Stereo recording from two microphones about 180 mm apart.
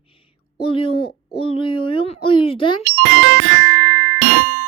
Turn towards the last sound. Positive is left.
turn(degrees=-50)  # may be behind; listen again after turning